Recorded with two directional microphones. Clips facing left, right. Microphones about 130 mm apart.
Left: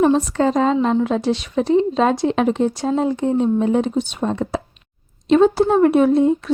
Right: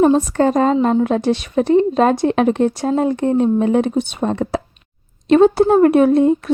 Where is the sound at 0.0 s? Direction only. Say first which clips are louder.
Right 2 dB; 45° right (ahead or behind).